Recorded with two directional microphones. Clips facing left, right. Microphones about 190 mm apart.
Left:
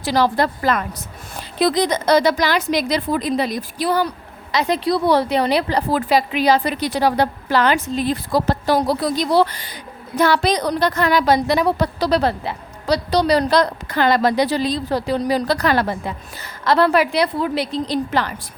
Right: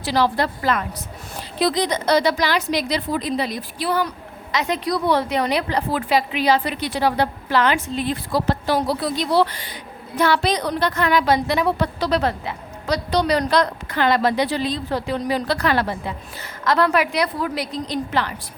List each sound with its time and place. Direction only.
0.0 s a woman's voice: 45° left (ahead or behind)